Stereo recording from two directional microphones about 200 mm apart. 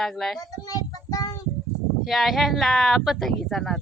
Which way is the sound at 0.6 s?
20° left (ahead or behind).